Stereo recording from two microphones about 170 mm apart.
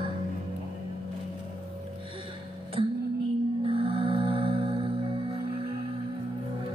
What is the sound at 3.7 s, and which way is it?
Music, 30° right (ahead or behind).